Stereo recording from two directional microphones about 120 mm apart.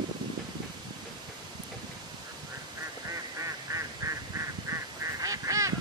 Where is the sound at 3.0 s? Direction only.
25° right (ahead or behind).